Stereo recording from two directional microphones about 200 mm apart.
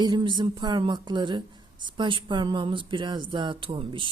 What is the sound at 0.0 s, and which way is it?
Speech, 20° right (ahead or behind).